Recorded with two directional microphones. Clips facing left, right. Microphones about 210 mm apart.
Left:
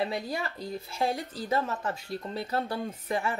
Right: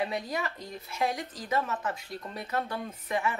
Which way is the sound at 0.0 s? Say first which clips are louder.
Left 1 dB; 30° left (ahead or behind).